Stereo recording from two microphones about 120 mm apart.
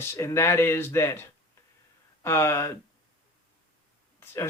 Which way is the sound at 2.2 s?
20° left (ahead or behind).